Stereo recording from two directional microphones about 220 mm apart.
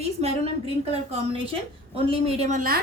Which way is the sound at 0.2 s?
30° right (ahead or behind).